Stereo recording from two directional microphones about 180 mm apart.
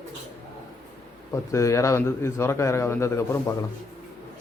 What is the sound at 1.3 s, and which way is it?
Speech, 15° left (ahead or behind).